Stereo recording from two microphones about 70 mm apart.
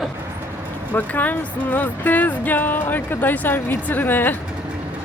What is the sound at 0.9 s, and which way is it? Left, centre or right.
Speech, left.